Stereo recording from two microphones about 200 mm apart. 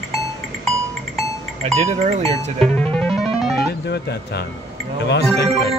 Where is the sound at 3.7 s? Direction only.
55° left (ahead or behind).